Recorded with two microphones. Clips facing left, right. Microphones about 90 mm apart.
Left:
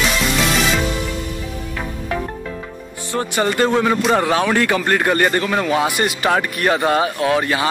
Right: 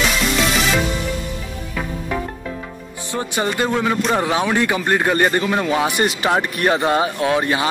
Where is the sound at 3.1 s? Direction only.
15° right (ahead or behind).